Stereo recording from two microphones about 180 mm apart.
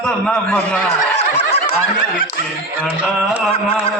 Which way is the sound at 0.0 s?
5° left (ahead or behind).